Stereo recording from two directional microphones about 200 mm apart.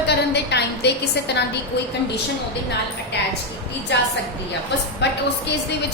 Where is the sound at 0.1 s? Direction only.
55° left (ahead or behind).